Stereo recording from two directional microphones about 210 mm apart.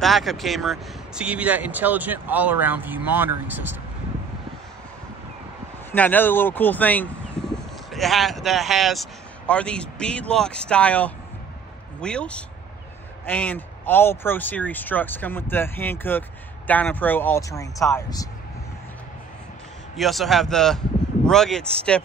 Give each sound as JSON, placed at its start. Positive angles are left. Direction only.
{"t": 0.0, "sound": "speech", "side_deg": 0}
{"t": 5.9, "sound": "speech", "side_deg": 10}
{"t": 20.0, "sound": "speech", "side_deg": 0}